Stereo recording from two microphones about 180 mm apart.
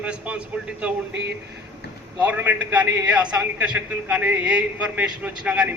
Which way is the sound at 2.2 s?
10° right (ahead or behind).